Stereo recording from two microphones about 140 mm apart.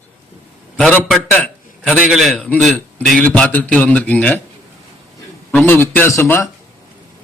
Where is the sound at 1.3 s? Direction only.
10° left (ahead or behind).